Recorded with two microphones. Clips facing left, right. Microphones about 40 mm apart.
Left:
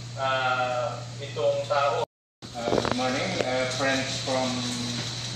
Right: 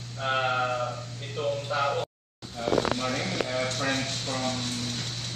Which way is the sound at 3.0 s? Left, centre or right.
Centre.